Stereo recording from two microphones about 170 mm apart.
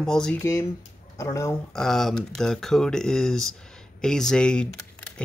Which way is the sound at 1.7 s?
Centre (ahead or behind).